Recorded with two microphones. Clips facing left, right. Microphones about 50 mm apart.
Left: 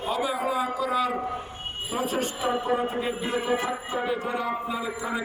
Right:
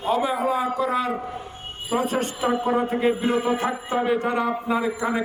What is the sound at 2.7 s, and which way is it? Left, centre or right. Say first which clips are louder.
A man's voice: right 5 dB; right.